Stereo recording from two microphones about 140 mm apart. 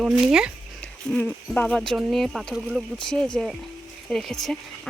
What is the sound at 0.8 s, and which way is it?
Speech, 10° left (ahead or behind).